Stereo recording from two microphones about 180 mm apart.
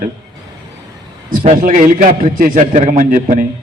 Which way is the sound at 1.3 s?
50° right (ahead or behind).